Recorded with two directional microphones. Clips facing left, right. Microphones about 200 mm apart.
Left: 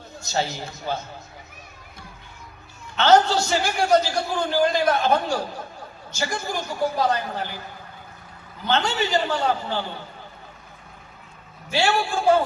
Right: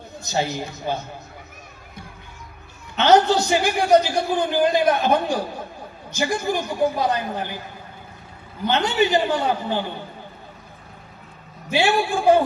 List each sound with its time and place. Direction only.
0.3 s a man's voice: 15° right (ahead or behind)
3.0 s a man's voice: 15° right (ahead or behind)
8.7 s a man's voice: 15° right (ahead or behind)
11.7 s a man's voice: 15° right (ahead or behind)